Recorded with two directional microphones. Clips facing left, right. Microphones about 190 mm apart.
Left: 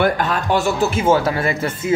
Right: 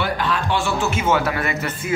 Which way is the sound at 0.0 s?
45° left (ahead or behind).